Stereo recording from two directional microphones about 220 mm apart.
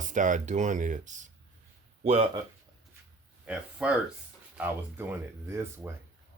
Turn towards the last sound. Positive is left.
turn(degrees=-10)  # may be behind; listen again after turning